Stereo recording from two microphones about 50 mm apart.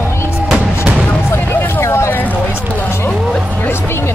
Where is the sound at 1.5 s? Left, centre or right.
Left.